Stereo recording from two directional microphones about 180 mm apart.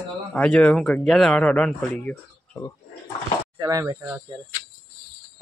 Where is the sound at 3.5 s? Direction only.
20° right (ahead or behind).